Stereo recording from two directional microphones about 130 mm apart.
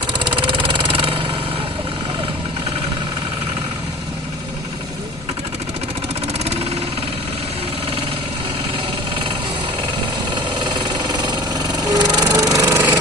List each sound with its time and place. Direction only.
0.1 s vehicle: 40° right (ahead or behind)
6.4 s vehicle: 55° right (ahead or behind)
10.3 s engine: 35° right (ahead or behind)